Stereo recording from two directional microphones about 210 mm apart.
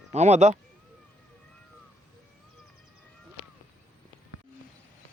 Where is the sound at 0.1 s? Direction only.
30° right (ahead or behind).